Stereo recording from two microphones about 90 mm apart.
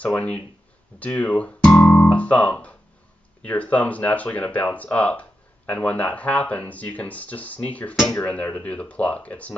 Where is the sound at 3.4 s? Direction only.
15° left (ahead or behind).